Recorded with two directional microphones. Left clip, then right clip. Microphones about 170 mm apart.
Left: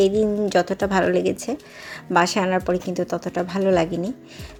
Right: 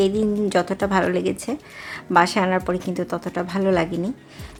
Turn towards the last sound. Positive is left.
turn(degrees=15)  # may be behind; listen again after turning